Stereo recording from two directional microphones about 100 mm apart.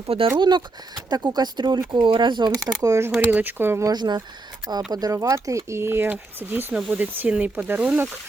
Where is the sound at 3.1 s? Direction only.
15° right (ahead or behind).